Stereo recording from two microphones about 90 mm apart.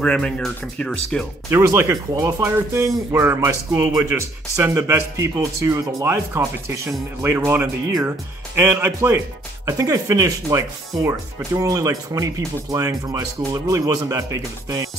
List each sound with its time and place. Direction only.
0.0 s speech: 10° left (ahead or behind)
1.5 s speech: 35° right (ahead or behind)
9.7 s speech: 35° right (ahead or behind)